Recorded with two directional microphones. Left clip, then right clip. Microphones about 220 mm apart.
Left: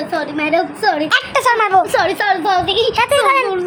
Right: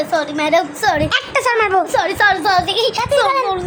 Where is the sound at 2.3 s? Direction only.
30° right (ahead or behind).